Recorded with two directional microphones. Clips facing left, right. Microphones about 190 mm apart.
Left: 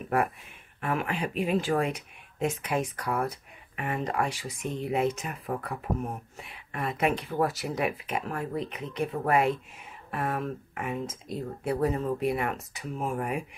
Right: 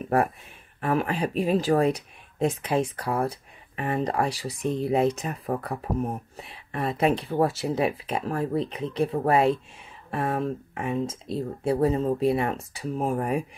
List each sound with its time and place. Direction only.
0.7 s speech: 35° right (ahead or behind)